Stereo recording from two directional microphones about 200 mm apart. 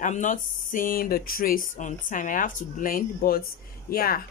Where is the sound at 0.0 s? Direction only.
40° left (ahead or behind).